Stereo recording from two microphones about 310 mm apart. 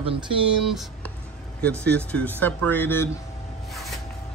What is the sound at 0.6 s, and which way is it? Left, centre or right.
A man's voice, centre.